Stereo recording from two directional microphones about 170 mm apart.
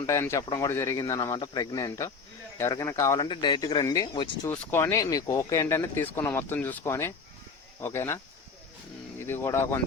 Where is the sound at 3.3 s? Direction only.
30° left (ahead or behind).